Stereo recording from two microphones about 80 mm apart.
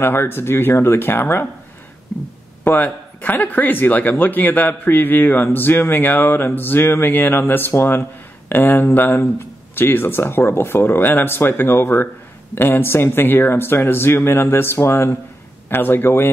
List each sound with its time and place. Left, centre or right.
0.0 s speech: left
2.6 s speech: left